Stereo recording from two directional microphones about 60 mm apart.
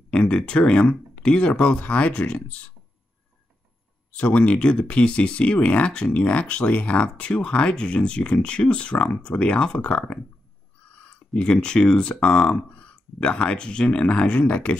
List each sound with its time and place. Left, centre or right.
0.1 s speech: centre
4.2 s speech: left